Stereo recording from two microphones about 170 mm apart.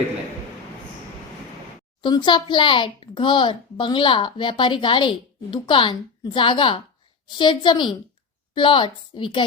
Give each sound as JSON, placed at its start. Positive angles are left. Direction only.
{"t": 2.0, "sound": "a child's voice", "side_deg": 25}